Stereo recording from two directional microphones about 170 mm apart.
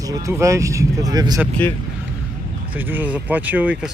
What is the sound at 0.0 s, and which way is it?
Speech, 20° right (ahead or behind).